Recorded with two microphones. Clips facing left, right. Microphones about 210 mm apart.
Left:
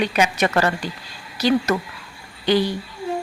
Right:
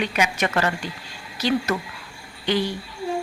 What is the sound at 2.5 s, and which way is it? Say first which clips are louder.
Speech: left 5 dB; 35° left (ahead or behind).